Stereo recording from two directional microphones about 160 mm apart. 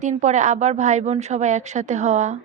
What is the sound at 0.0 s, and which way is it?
Speech, 45° right (ahead or behind).